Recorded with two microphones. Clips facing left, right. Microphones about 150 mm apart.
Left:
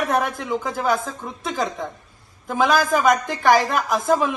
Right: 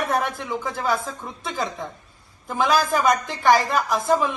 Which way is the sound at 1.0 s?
Centre (ahead or behind).